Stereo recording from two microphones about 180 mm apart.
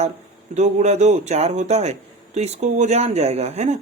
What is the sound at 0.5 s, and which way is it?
A man's voice, 40° right (ahead or behind).